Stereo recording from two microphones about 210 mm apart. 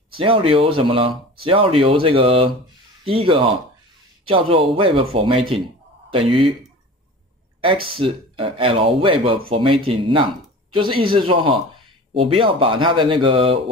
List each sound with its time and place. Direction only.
0.1 s speech: 25° right (ahead or behind)
7.6 s speech: 25° right (ahead or behind)